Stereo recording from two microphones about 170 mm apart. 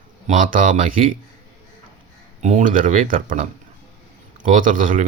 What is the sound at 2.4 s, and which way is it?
Speech, 45° right (ahead or behind).